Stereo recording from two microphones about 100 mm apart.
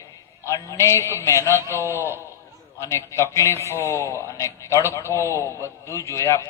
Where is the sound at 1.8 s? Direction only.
25° right (ahead or behind).